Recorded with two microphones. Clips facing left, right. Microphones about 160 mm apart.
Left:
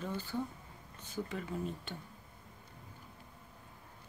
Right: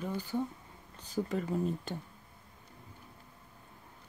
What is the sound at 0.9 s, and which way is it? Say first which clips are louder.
Speech: right 6 dB; 35° right (ahead or behind).